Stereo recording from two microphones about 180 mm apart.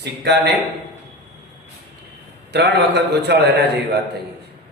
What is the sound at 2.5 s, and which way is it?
Speech, 70° right (ahead or behind).